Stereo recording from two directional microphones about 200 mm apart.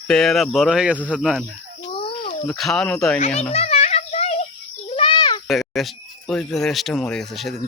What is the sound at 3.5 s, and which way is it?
Child singing, 30° left (ahead or behind).